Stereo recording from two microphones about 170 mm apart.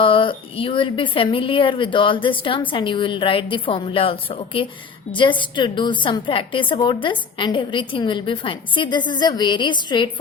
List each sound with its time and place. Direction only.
0.0 s a woman's voice: 30° left (ahead or behind)